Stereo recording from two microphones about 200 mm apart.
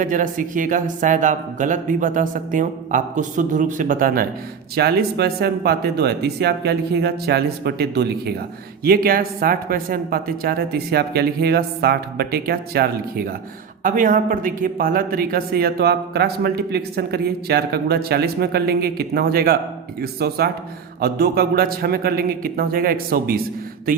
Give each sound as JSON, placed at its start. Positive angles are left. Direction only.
{"t": 0.0, "sound": "speech", "side_deg": -40}